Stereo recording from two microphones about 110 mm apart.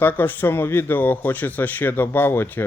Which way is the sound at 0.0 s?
15° left (ahead or behind).